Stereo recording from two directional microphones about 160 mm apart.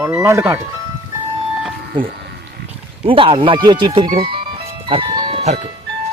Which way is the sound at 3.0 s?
35° right (ahead or behind).